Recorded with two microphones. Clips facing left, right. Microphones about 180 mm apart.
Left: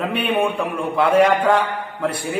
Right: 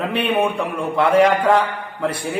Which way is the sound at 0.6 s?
Centre (ahead or behind).